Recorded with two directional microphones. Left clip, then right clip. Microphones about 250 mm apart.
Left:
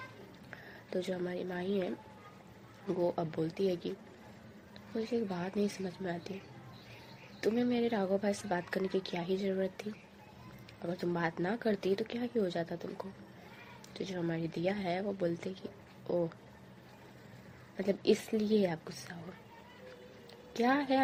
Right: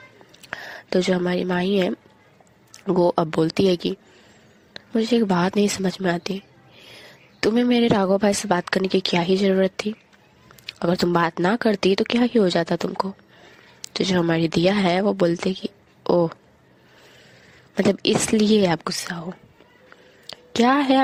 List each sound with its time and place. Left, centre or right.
0.5 s a woman's voice: right
5.3 s a woman's voice: right
7.4 s a woman's voice: right
17.7 s a woman's voice: right
20.2 s a sound: right